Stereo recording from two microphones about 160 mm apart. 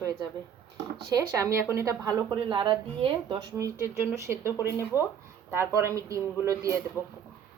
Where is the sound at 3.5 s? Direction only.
15° right (ahead or behind).